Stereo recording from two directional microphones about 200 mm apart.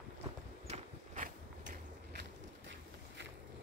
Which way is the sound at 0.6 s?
35° right (ahead or behind).